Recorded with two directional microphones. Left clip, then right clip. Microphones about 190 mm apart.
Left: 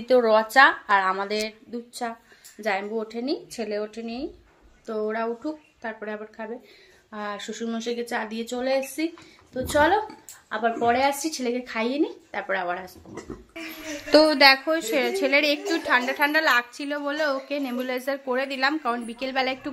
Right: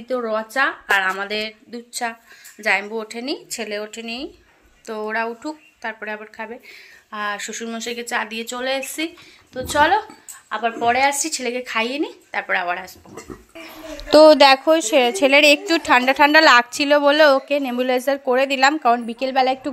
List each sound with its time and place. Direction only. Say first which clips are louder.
0.0 s a woman's voice: left 4 dB; 10° left (ahead or behind)
14.1 s a woman's voice: right 6 dB; 35° right (ahead or behind)